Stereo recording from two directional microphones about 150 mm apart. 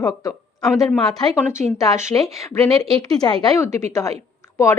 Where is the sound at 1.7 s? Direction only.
20° left (ahead or behind).